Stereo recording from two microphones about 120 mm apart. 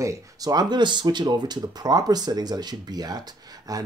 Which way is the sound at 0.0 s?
30° right (ahead or behind).